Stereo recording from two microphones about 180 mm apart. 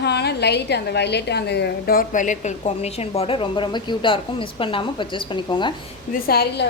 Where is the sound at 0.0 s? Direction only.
65° left (ahead or behind); by 5.7 s 25° left (ahead or behind).